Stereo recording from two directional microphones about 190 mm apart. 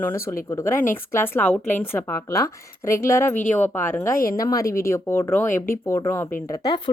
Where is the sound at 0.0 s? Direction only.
15° left (ahead or behind).